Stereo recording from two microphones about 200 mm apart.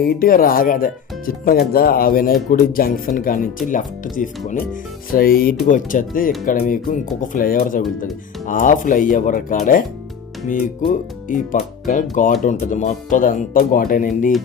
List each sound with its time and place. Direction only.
0.0 s speech: 45° left (ahead or behind)